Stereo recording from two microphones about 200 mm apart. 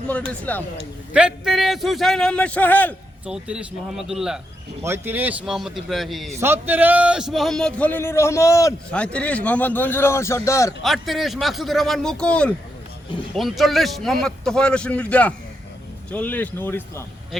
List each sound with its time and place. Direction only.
0.3 s a man's voice: 10° left (ahead or behind)
1.1 s a man's voice: 5° right (ahead or behind)
3.2 s a man's voice: 5° right (ahead or behind)
6.4 s a man's voice: 10° right (ahead or behind); by 10.8 s 15° left (ahead or behind)
10.8 s a man's voice: centre (ahead or behind)